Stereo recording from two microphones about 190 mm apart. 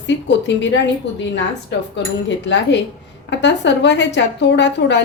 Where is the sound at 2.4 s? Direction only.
70° left (ahead or behind).